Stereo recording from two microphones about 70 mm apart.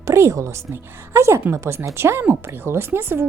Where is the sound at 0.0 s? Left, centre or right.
Right.